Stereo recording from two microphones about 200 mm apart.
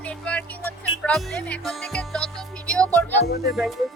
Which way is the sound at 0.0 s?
5° left (ahead or behind).